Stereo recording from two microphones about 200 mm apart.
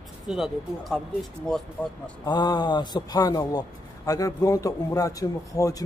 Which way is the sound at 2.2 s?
20° left (ahead or behind).